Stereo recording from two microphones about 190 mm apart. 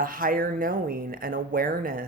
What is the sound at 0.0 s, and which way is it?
Speech, 45° right (ahead or behind).